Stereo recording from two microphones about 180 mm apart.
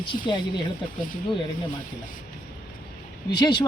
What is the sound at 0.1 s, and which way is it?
Speech, 45° left (ahead or behind).